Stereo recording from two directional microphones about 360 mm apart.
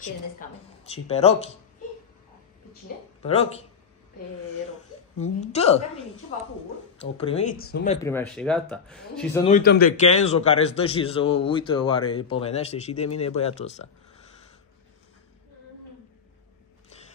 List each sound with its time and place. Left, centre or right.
0.0 s a man's voice: centre
3.2 s a man's voice: centre
5.2 s a man's voice: centre
7.0 s speech: centre
8.0 s speech: centre
9.4 s a man's voice: left